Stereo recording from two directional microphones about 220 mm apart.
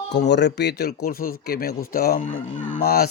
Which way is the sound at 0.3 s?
50° left (ahead or behind).